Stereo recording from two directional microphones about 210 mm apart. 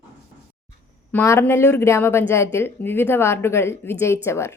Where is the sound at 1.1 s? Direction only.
10° left (ahead or behind).